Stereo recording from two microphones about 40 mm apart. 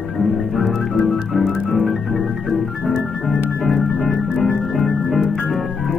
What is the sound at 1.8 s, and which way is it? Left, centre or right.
Organ, centre.